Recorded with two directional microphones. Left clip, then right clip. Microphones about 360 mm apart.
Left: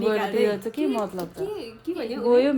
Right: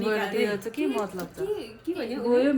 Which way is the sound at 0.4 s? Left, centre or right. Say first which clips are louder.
Left 4 dB; left.